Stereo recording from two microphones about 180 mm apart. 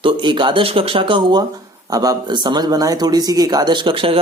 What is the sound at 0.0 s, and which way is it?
Speech, 25° right (ahead or behind).